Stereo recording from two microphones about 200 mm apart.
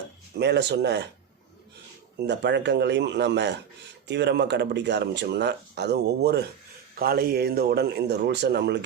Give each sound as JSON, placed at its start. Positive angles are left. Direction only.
{"t": 0.3, "sound": "speech", "side_deg": -55}
{"t": 2.1, "sound": "speech", "side_deg": -60}